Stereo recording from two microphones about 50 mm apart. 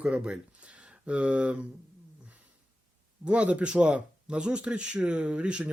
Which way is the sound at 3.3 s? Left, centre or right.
Right.